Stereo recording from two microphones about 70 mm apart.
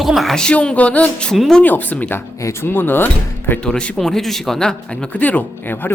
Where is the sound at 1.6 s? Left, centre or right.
Left.